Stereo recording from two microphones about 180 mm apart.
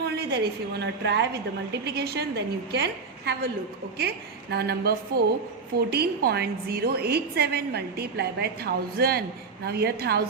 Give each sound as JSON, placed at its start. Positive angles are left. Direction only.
{"t": 0.0, "sound": "a woman's voice", "side_deg": -65}
{"t": 4.5, "sound": "a woman's voice", "side_deg": -60}